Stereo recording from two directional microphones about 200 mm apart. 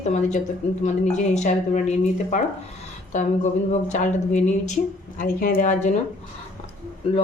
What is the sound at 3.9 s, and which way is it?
Speech, 35° left (ahead or behind).